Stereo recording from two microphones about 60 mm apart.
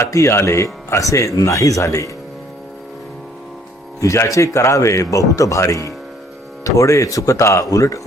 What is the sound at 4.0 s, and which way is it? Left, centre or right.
Speech, left.